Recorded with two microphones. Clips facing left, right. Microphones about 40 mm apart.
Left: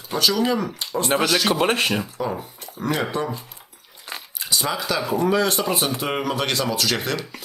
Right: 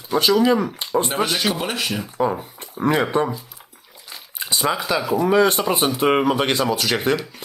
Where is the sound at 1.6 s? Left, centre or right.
Left.